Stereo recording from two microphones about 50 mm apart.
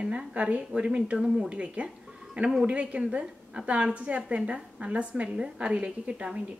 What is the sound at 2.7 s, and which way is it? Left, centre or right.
A woman's voice, right.